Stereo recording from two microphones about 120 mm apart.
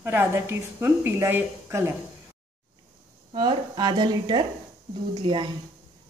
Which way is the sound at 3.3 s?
40° right (ahead or behind).